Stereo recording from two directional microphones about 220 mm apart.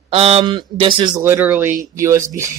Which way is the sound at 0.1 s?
25° right (ahead or behind).